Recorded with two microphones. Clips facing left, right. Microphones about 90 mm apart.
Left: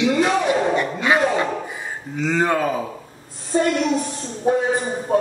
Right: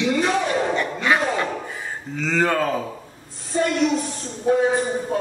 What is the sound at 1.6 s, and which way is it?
Speech, 15° left (ahead or behind).